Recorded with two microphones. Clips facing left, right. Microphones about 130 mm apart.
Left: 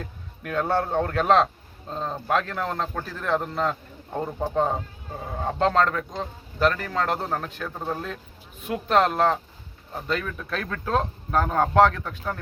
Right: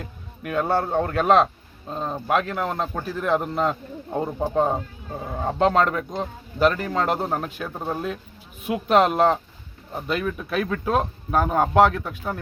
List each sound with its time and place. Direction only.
0.0 s speech: 5° right (ahead or behind)